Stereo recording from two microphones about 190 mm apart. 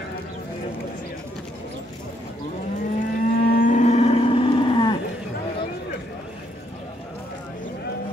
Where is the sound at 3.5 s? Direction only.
45° left (ahead or behind); by 5.0 s 25° left (ahead or behind).